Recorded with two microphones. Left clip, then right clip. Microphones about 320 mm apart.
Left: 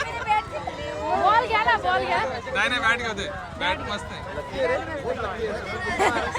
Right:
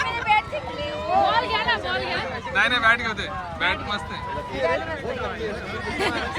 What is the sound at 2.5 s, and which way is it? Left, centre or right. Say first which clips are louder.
Speech: right 4 dB; centre.